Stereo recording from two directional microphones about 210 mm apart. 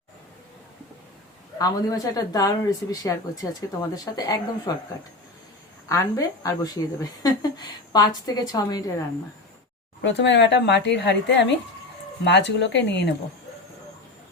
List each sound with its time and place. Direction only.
1.5 s a woman's voice: 15° left (ahead or behind)
5.9 s a woman's voice: 15° left (ahead or behind)
10.0 s speech: 60° left (ahead or behind)